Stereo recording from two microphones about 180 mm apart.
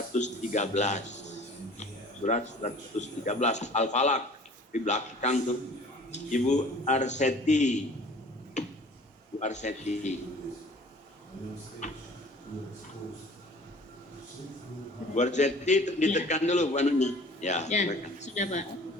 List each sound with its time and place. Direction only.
0.1 s a man's voice: 40° left (ahead or behind)
8.6 s tick-tock: 40° left (ahead or behind)
9.4 s a man's voice: 40° left (ahead or behind)
11.8 s a sound: 40° left (ahead or behind)
15.1 s a man's voice: 40° left (ahead or behind)